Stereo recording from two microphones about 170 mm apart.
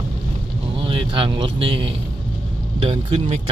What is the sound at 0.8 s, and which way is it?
Speech, 30° right (ahead or behind).